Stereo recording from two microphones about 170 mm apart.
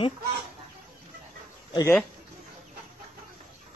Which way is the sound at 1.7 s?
25° left (ahead or behind).